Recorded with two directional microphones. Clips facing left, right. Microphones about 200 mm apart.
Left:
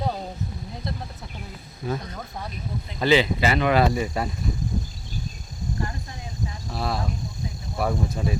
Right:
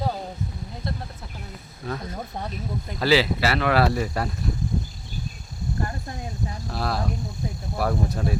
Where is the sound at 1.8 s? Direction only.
5° left (ahead or behind).